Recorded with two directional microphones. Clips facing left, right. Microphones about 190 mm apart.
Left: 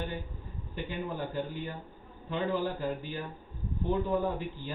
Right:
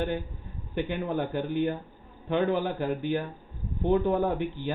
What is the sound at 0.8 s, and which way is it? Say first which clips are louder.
Speech: right 7 dB; 65° right (ahead or behind).